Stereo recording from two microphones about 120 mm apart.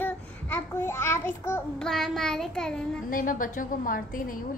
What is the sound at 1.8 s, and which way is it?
Child singing, centre (ahead or behind).